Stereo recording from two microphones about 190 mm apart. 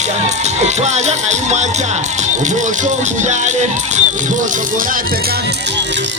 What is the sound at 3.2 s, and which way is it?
Speech, 40° right (ahead or behind).